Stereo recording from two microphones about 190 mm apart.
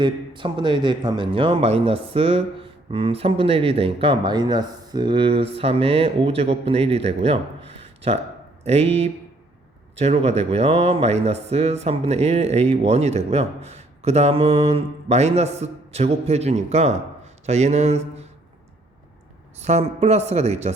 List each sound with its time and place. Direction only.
0.0 s speech: 25° right (ahead or behind)
19.5 s speech: 35° right (ahead or behind)